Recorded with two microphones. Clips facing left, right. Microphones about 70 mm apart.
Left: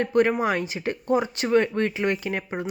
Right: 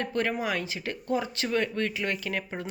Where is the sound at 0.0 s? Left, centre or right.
Left.